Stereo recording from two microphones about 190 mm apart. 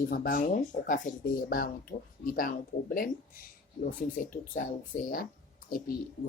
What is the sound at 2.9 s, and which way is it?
Speech, 50° left (ahead or behind).